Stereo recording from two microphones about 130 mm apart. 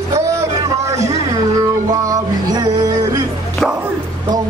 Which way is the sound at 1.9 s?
25° right (ahead or behind).